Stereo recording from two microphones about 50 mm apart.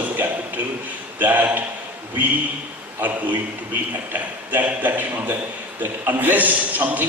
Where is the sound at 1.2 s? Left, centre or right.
Right.